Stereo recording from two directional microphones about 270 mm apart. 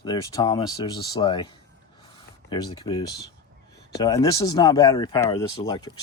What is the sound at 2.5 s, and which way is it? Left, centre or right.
Speech, centre.